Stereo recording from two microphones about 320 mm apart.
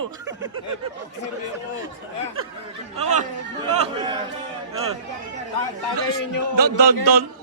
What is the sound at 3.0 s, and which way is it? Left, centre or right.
Speech, right.